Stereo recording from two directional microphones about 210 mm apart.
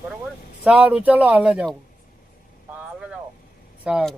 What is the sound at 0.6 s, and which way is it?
Speech, 5° right (ahead or behind).